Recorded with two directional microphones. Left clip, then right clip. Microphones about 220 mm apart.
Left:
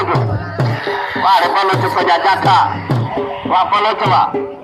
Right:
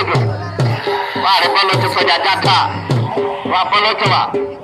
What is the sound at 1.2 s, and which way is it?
Music, 35° left (ahead or behind).